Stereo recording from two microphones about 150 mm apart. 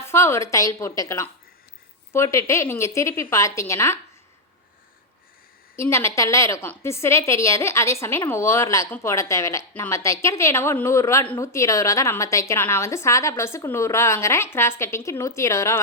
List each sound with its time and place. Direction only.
0.0 s a woman's voice: 15° left (ahead or behind)
5.7 s a woman's voice: 15° left (ahead or behind)